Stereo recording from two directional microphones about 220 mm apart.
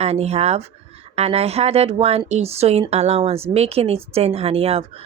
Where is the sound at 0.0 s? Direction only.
30° right (ahead or behind).